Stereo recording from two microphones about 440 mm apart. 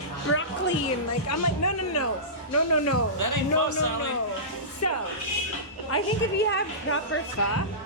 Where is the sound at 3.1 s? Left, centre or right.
Right.